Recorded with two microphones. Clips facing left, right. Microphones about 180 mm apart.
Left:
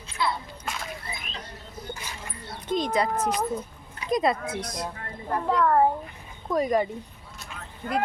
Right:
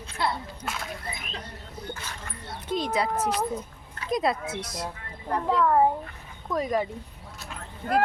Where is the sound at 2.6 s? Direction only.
5° right (ahead or behind).